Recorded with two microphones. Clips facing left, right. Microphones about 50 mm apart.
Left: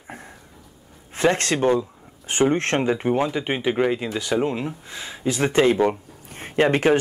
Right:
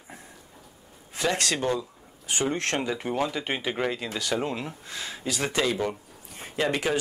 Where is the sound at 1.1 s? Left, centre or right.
Left.